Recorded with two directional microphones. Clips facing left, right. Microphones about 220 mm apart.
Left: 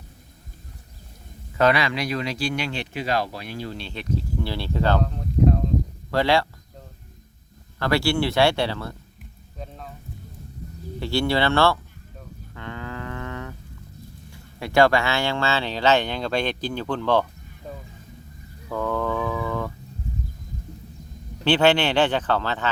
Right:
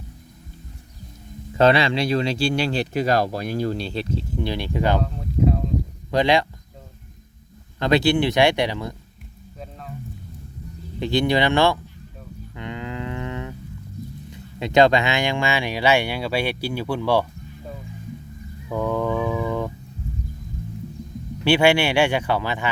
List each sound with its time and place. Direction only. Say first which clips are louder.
1.5 s speech: right 3 dB; 25° right (ahead or behind)
5.0 s a sound: left 1 dB; centre (ahead or behind)
6.1 s speech: right 2 dB; 20° right (ahead or behind)
7.8 s speech: right 4 dB; 20° right (ahead or behind)
9.6 s music: even; centre (ahead or behind)
11.0 s speech: right 2 dB; 20° right (ahead or behind)
12.5 s a sound: right 3 dB; 20° right (ahead or behind)
14.3 s speech: right 3 dB; 20° right (ahead or behind)
18.7 s a sound: right 2 dB; 15° right (ahead or behind)
21.4 s speech: right 1 dB; 10° right (ahead or behind)